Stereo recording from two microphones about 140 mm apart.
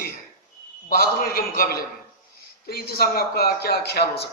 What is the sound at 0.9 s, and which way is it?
Speech, 90° left.